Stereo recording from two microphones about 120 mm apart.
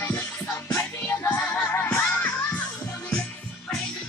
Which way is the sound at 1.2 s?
15° left (ahead or behind).